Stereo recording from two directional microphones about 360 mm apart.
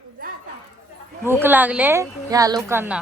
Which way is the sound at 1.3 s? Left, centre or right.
Centre.